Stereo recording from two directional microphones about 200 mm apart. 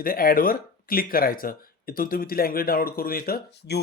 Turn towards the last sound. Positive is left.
turn(degrees=50)  # may be behind; listen again after turning